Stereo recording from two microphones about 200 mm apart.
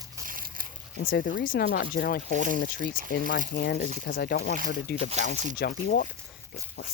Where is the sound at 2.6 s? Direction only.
50° left (ahead or behind).